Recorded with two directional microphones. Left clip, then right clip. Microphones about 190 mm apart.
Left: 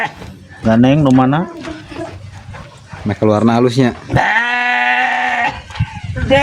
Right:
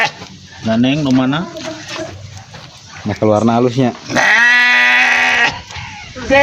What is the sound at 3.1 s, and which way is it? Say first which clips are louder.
Speech: even; 20° left (ahead or behind).